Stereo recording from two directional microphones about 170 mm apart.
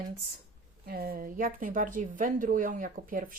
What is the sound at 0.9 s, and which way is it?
Speech, 60° right (ahead or behind).